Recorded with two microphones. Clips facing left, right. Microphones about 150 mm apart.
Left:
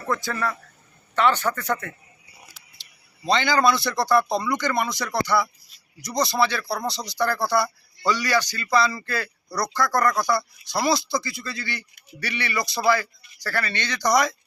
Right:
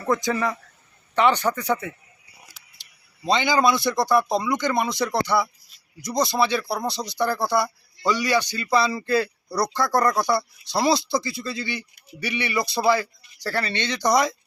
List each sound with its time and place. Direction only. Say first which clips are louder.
0.1 s speech: right 4 dB; 15° right (ahead or behind)
3.2 s speech: even; 15° right (ahead or behind)